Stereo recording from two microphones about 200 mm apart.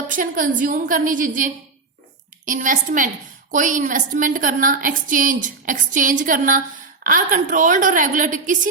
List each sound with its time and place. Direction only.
0.1 s a woman's voice: 40° right (ahead or behind)